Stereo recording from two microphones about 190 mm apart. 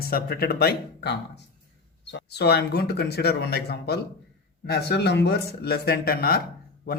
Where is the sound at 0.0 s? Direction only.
55° left (ahead or behind).